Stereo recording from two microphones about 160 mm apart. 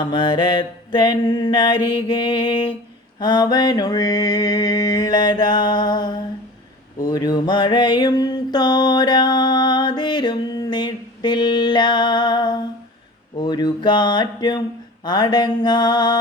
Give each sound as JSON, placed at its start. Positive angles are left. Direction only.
{"t": 0.0, "sound": "mantra", "side_deg": 30}